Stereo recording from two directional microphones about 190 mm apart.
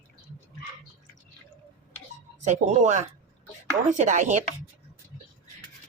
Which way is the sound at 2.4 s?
40° right (ahead or behind).